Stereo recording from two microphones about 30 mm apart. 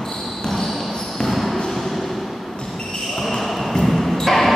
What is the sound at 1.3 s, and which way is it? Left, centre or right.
Basketball bounce, centre.